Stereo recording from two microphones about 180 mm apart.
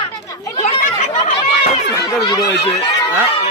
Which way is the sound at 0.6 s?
45° left (ahead or behind).